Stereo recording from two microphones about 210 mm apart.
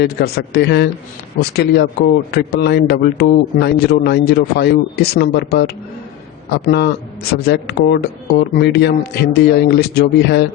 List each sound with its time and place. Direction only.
0.0 s speech: 50° left (ahead or behind)